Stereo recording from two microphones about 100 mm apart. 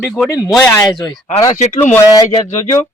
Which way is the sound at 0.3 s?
35° left (ahead or behind).